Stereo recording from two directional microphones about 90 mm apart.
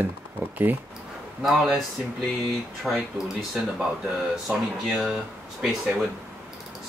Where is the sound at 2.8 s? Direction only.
Centre (ahead or behind).